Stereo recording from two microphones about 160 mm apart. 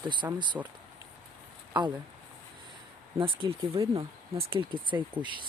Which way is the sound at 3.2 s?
35° right (ahead or behind).